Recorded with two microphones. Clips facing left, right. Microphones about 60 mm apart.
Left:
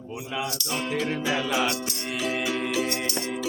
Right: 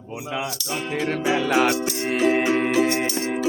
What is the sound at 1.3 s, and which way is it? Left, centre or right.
Music, right.